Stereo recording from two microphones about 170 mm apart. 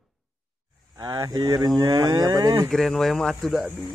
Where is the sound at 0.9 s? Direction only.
20° right (ahead or behind).